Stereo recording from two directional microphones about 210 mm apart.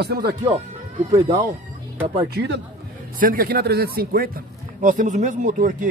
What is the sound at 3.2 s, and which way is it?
Speech, 45° right (ahead or behind).